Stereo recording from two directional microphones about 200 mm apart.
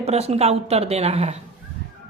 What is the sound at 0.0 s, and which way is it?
Speech, 30° right (ahead or behind).